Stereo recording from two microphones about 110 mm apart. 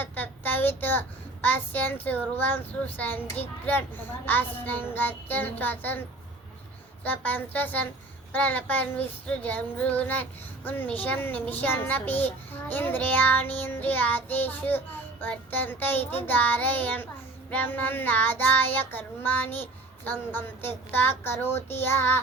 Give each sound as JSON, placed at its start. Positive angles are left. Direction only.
{"t": 0.0, "sound": "a sound", "side_deg": 15}
{"t": 1.5, "sound": "child singing", "side_deg": 15}
{"t": 7.0, "sound": "child singing", "side_deg": 15}